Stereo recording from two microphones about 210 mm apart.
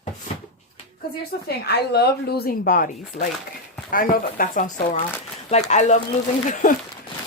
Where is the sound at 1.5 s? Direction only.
50° left (ahead or behind).